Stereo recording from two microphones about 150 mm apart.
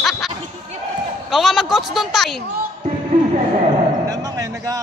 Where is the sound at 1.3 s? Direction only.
Centre (ahead or behind).